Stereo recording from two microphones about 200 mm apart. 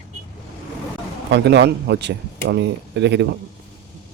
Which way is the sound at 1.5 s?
60° right (ahead or behind).